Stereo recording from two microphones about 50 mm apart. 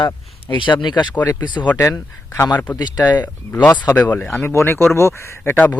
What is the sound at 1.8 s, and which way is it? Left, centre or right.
Speech, left.